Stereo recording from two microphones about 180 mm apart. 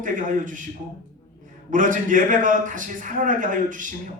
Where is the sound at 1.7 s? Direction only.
45° right (ahead or behind).